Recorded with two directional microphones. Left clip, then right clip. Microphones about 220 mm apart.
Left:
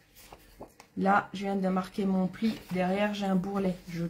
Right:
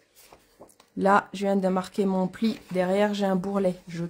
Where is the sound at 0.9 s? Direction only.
45° right (ahead or behind).